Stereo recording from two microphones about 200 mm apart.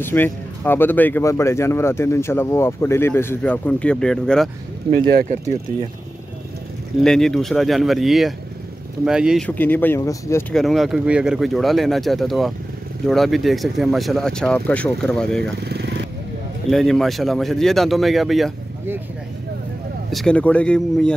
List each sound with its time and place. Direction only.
0.0 s speech: 10° left (ahead or behind)
5.3 s speech: 35° right (ahead or behind)
7.0 s speech: centre (ahead or behind)
9.6 s speech: 10° left (ahead or behind)
10.5 s speech: centre (ahead or behind)
15.6 s vehicle: 55° right (ahead or behind)
16.7 s speech: centre (ahead or behind)
20.1 s speech: centre (ahead or behind)